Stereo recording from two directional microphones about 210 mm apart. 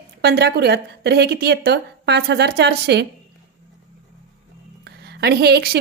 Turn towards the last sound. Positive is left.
turn(degrees=-50)  # may be behind; listen again after turning